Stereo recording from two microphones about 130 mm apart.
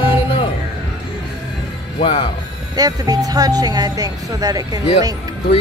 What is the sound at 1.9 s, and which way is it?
Speech, 45° left (ahead or behind).